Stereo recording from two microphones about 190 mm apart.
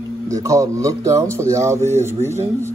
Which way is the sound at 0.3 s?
15° right (ahead or behind).